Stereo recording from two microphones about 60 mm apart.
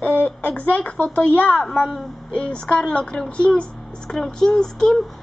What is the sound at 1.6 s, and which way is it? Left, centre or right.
Speech, centre.